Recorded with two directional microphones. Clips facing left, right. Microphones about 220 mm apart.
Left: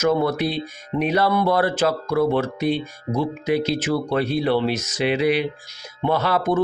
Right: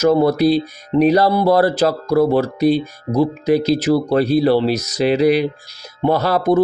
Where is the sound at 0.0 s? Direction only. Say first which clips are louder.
Right 6 dB; 35° right (ahead or behind).